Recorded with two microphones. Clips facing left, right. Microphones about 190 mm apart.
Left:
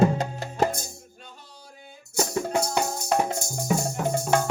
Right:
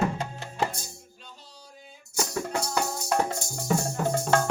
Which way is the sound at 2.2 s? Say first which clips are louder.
Left 4 dB; 50° left (ahead or behind).